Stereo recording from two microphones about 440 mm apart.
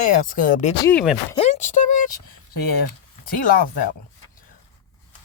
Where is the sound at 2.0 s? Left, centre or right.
Left.